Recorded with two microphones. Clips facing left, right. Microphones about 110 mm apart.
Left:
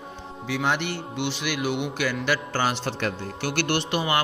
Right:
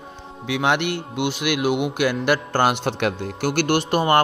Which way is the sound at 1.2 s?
55° right (ahead or behind).